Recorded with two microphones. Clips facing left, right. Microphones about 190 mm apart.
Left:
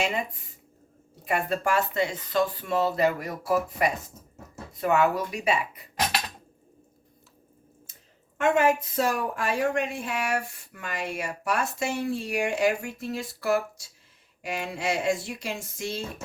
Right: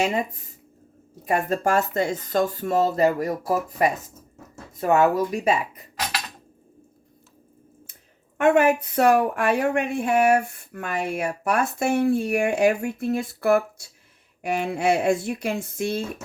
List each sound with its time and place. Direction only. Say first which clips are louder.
1.2 s speech: right 4 dB; 45° right (ahead or behind)
8.4 s speech: right 4 dB; 60° right (ahead or behind)